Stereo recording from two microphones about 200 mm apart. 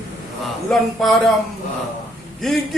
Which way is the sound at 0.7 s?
Centre (ahead or behind).